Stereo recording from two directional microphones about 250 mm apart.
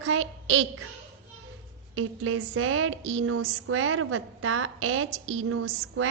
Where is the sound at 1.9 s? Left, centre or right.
Right.